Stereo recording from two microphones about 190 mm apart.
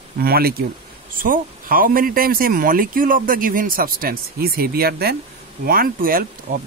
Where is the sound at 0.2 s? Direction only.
55° right (ahead or behind).